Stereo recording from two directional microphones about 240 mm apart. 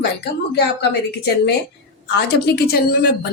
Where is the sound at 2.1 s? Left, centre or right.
Left.